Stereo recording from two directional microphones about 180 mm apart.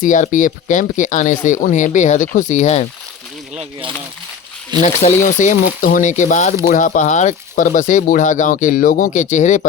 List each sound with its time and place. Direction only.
0.0 s speech: 45° left (ahead or behind)
3.5 s speech: 35° right (ahead or behind)
4.8 s speech: 45° left (ahead or behind)